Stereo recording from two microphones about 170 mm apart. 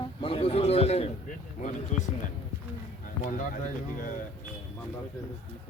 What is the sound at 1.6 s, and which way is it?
Speech, 45° left (ahead or behind).